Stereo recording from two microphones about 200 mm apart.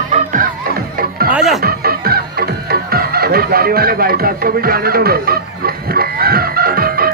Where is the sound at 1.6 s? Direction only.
50° right (ahead or behind).